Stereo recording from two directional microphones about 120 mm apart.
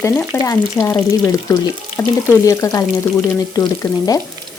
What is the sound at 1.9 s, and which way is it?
Speech, 20° left (ahead or behind).